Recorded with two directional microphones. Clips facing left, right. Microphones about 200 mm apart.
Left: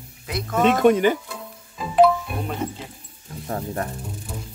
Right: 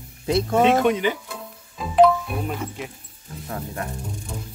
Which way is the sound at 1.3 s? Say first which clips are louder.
Even; centre (ahead or behind).